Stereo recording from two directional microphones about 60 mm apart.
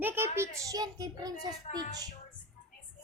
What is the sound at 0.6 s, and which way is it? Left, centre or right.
Speech, right.